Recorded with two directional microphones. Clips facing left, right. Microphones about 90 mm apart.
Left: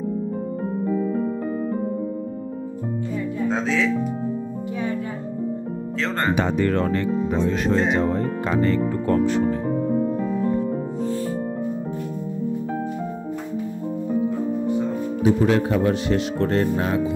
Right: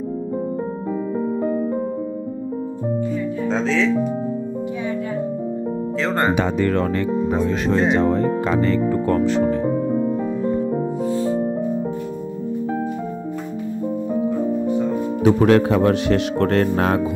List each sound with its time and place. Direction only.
3.4 s speech: 10° left (ahead or behind)
5.9 s speech: 5° right (ahead or behind)
8.0 s speech: 90° right
11.0 s music: 20° right (ahead or behind)
15.2 s speech: 70° right (ahead or behind)